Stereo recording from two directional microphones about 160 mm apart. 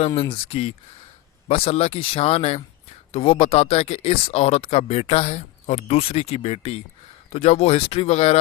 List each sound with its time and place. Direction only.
0.2 s speech: 35° left (ahead or behind)